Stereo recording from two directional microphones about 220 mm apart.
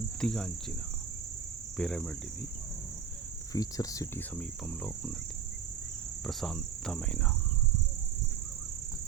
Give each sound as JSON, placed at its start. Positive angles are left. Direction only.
{"t": 0.2, "sound": "cricket", "side_deg": 5}
{"t": 1.8, "sound": "cricket", "side_deg": 0}
{"t": 3.5, "sound": "speech", "side_deg": 15}
{"t": 6.2, "sound": "cricket", "side_deg": 0}